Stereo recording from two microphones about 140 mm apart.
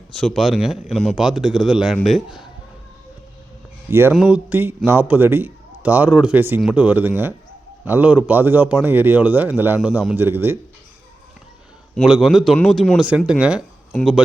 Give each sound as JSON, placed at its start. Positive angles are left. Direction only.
{"t": 0.1, "sound": "speech", "side_deg": 0}
{"t": 3.8, "sound": "speech", "side_deg": -15}
{"t": 4.1, "sound": "speech", "side_deg": -5}
{"t": 11.9, "sound": "speech", "side_deg": -5}